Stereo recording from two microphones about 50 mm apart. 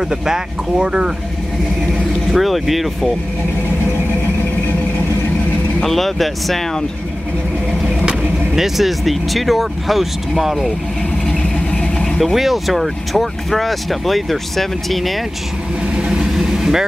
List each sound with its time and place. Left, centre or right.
0.1 s speech: centre
2.3 s speech: centre
5.8 s speech: centre
8.0 s vehicle: right
8.5 s speech: centre
11.7 s vehicle: left
12.2 s speech: centre
16.1 s vehicle: centre